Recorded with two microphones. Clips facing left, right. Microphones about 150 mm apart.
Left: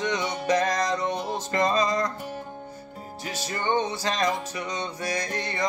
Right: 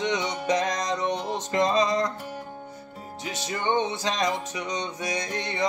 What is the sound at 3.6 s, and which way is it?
Music, 20° right (ahead or behind).